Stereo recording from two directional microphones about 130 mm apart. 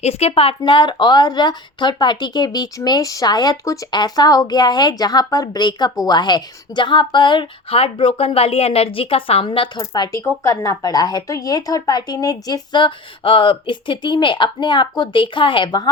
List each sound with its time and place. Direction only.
0.0 s speech: 50° left (ahead or behind); by 15.9 s 35° left (ahead or behind)